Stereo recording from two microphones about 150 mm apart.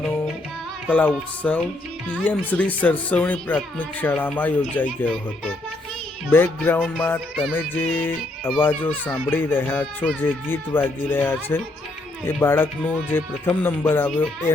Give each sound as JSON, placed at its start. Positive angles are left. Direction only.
{"t": 0.9, "sound": "speech", "side_deg": 10}
{"t": 6.3, "sound": "speech", "side_deg": 15}